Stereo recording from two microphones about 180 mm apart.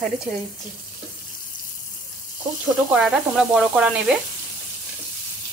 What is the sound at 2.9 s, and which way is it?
Speech, 5° right (ahead or behind).